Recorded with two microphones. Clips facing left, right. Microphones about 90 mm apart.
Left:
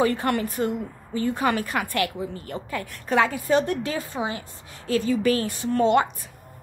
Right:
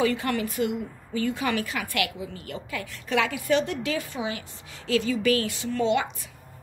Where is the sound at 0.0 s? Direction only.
45° left (ahead or behind).